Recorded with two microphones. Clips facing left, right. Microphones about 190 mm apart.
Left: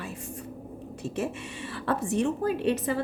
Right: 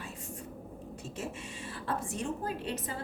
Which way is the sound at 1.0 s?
65° left (ahead or behind).